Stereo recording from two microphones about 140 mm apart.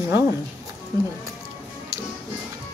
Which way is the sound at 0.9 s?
25° right (ahead or behind).